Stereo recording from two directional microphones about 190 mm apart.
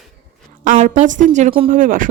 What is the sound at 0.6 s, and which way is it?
A woman's voice, 45° right (ahead or behind).